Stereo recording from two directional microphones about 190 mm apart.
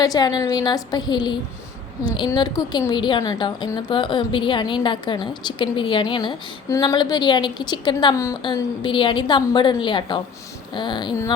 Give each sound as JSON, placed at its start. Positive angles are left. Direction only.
{"t": 0.0, "sound": "a woman's voice", "side_deg": 20}